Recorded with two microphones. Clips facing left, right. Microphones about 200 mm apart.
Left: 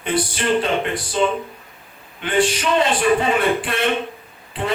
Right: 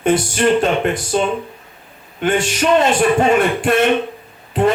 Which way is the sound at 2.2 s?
45° right (ahead or behind).